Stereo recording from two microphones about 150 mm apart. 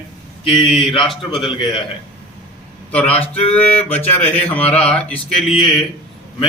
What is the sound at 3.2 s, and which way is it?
A man's voice, 40° left (ahead or behind).